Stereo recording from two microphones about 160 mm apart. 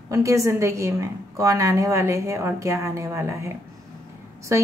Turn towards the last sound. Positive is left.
turn(degrees=-15)  # may be behind; listen again after turning